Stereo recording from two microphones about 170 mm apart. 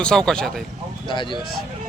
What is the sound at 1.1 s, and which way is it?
Speech, 30° left (ahead or behind).